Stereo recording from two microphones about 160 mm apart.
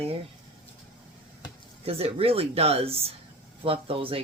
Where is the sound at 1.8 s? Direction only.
40° right (ahead or behind).